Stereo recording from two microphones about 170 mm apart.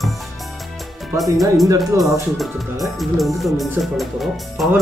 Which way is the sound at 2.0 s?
Centre (ahead or behind).